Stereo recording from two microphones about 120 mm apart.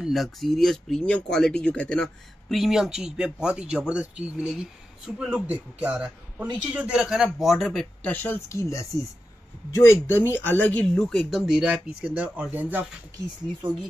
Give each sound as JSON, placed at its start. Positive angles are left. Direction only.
{"t": 0.0, "sound": "speech", "side_deg": 0}
{"t": 2.5, "sound": "speech", "side_deg": 0}
{"t": 8.0, "sound": "speech", "side_deg": 15}